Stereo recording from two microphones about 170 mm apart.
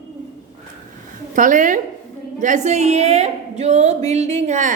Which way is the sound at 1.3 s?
50° right (ahead or behind).